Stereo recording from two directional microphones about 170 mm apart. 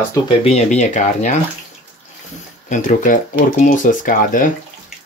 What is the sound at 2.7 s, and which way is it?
Speech, 45° left (ahead or behind).